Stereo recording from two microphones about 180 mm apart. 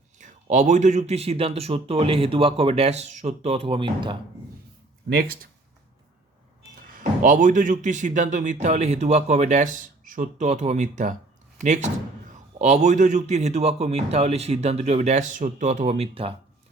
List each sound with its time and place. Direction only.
0.2 s speech: 40° right (ahead or behind)
5.0 s speech: 60° right (ahead or behind)
6.6 s speech: 50° right (ahead or behind); by 16.3 s 35° right (ahead or behind)